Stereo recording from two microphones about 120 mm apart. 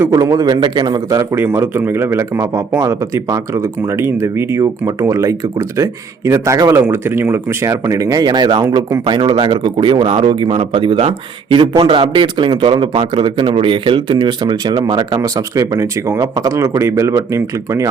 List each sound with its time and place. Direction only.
0.0 s a man's voice: 25° right (ahead or behind)
1.5 s a man's voice: 20° right (ahead or behind)